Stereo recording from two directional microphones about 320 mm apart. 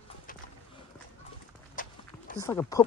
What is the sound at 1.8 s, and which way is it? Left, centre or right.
Walk, left.